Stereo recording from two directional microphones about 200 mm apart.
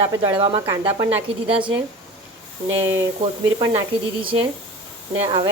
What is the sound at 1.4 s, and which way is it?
Speech, 25° right (ahead or behind).